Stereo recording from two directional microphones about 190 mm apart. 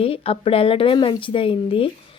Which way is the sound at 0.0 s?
30° left (ahead or behind).